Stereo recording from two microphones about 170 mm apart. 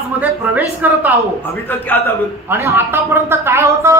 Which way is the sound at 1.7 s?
10° left (ahead or behind).